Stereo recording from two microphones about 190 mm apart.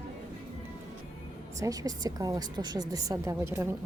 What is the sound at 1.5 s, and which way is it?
Speech, 15° right (ahead or behind).